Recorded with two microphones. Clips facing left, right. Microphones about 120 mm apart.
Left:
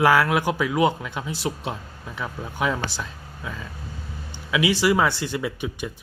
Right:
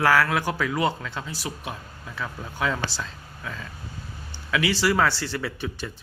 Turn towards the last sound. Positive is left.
turn(degrees=15)  # may be behind; listen again after turning